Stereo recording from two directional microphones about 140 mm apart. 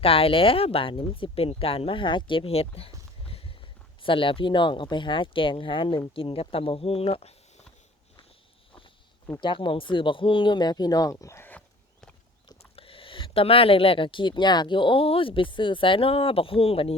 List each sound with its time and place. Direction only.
0.0 s speech: 40° left (ahead or behind)
9.4 s speech: 35° left (ahead or behind); by 12.1 s 10° left (ahead or behind)
12.7 s speech: 40° left (ahead or behind)